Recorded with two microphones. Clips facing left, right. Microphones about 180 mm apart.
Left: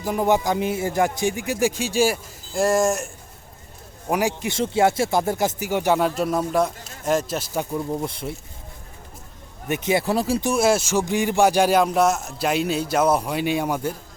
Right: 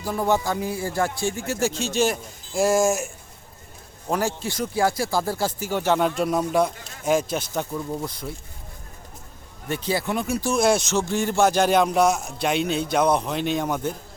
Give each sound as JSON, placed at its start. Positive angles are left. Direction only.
{"t": 0.0, "sound": "speech", "side_deg": 15}
{"t": 4.1, "sound": "speech", "side_deg": 15}
{"t": 6.0, "sound": "a man's voice", "side_deg": 0}
{"t": 7.7, "sound": "speech", "side_deg": 20}
{"t": 9.6, "sound": "speech", "side_deg": 20}
{"t": 10.1, "sound": "speech", "side_deg": 35}
{"t": 10.4, "sound": "speech", "side_deg": 5}